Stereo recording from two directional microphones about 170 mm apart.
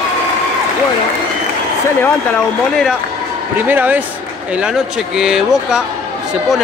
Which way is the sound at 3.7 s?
10° right (ahead or behind).